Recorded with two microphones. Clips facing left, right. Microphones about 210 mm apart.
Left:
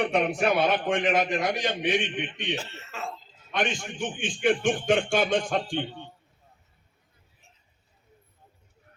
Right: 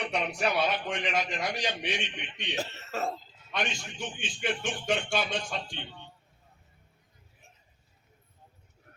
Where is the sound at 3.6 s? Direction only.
50° left (ahead or behind).